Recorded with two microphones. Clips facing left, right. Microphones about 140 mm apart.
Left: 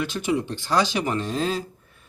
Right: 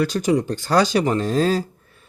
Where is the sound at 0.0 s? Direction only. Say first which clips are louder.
Right 6 dB; 40° right (ahead or behind).